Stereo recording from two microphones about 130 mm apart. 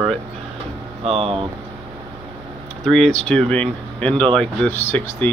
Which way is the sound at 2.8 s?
5° left (ahead or behind).